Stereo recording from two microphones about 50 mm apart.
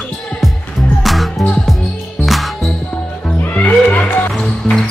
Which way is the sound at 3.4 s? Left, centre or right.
Left.